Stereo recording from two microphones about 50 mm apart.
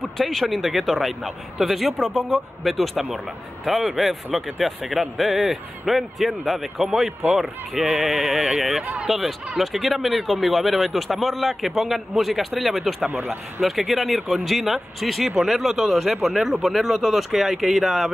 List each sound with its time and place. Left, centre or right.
0.2 s a man's voice: centre
8.0 s a man's voice: centre
13.1 s speech: right
13.6 s a man's voice: centre